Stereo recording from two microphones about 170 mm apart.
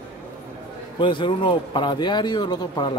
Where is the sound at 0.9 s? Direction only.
30° left (ahead or behind).